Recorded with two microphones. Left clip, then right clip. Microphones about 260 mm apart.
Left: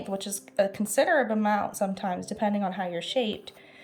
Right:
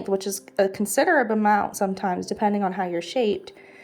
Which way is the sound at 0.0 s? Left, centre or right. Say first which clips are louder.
Right 8 dB; centre.